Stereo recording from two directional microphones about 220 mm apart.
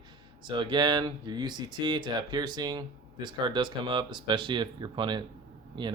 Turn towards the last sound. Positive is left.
turn(degrees=-20)  # may be behind; listen again after turning